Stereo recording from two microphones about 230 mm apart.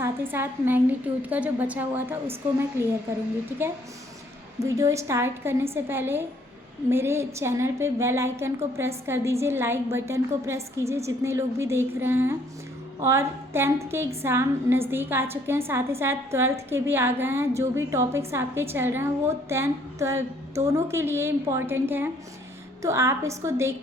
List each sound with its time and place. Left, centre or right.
0.0 s a woman's voice: centre
4.6 s a woman's voice: centre